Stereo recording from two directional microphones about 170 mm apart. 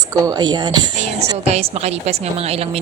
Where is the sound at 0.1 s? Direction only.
20° right (ahead or behind).